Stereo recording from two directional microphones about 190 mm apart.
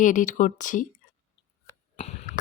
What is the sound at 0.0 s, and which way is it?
Speech, 45° left (ahead or behind).